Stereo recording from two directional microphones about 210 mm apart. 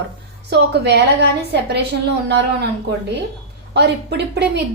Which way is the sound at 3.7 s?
55° right (ahead or behind).